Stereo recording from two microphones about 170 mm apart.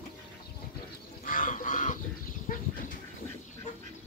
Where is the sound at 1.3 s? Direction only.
50° left (ahead or behind).